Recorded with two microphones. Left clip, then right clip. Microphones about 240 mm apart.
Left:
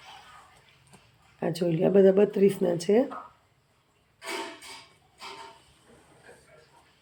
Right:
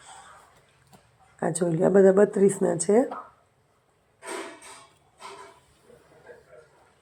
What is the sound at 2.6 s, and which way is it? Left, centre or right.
Speech, centre.